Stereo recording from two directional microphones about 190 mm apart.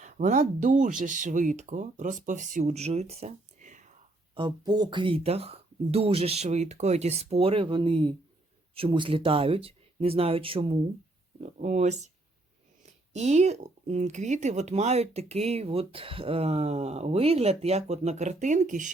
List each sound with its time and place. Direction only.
0.0 s speech: 40° right (ahead or behind)
4.4 s speech: 25° right (ahead or behind); by 18.9 s 40° right (ahead or behind)